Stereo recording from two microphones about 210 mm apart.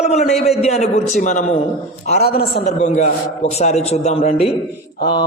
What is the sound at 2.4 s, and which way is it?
Speech, 50° left (ahead or behind).